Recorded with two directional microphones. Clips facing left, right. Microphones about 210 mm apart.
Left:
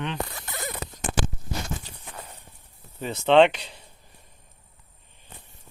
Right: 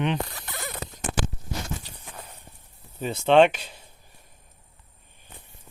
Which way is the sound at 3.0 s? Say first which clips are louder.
Even; 15° right (ahead or behind).